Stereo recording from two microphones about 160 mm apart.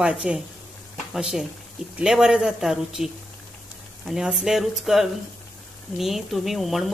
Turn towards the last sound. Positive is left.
turn(degrees=0)  # may be behind; listen again after turning